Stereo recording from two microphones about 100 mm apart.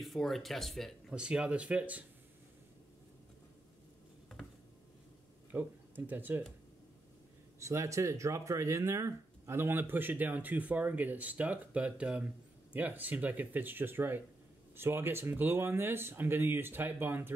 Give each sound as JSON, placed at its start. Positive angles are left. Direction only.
{"t": 0.0, "sound": "speech", "side_deg": 0}
{"t": 1.1, "sound": "speech", "side_deg": -10}
{"t": 5.5, "sound": "speech", "side_deg": -20}
{"t": 7.6, "sound": "speech", "side_deg": -30}